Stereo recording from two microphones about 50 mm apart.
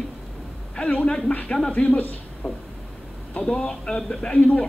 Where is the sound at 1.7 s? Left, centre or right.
Left.